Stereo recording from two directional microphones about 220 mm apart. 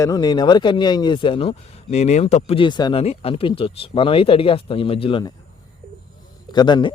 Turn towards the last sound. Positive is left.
turn(degrees=20)  # may be behind; listen again after turning